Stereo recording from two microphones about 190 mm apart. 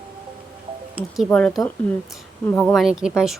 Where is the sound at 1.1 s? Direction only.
Centre (ahead or behind).